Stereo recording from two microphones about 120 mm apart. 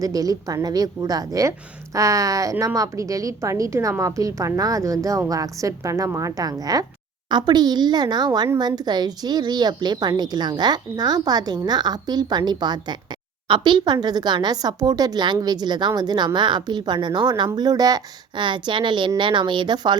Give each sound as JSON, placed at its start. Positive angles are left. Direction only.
{"t": 0.0, "sound": "a woman's voice", "side_deg": -30}